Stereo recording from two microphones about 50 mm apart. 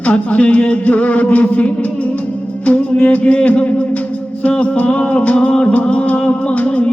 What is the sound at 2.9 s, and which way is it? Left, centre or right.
Music, left.